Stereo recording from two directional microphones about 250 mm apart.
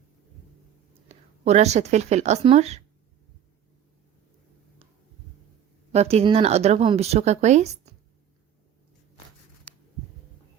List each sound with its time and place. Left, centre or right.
1.0 s speech: right
5.9 s speech: right